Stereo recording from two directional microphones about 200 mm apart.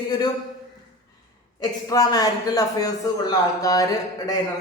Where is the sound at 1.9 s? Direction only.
20° left (ahead or behind).